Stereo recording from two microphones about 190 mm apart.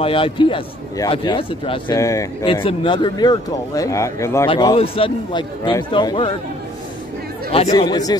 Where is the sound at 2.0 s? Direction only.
15° left (ahead or behind).